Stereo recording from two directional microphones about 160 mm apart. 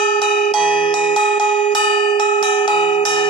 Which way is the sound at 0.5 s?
30° left (ahead or behind).